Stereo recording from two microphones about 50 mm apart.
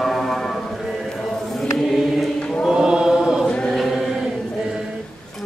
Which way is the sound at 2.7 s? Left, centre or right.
Centre.